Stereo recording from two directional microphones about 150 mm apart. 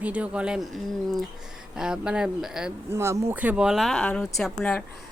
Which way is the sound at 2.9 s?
20° right (ahead or behind).